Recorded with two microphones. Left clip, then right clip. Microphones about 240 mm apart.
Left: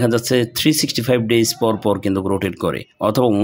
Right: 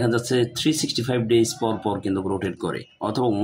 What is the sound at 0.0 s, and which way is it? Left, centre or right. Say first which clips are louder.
Speech: left 5 dB; left.